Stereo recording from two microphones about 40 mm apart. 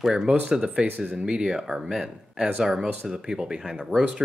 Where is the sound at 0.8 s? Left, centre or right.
Right.